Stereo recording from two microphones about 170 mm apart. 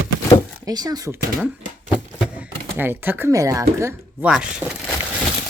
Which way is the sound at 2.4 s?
10° right (ahead or behind).